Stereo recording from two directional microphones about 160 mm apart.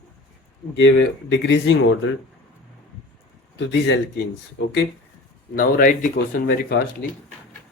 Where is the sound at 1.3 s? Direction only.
90° left.